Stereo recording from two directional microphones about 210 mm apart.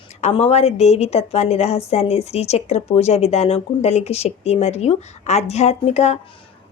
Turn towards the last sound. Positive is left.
turn(degrees=30)  # may be behind; listen again after turning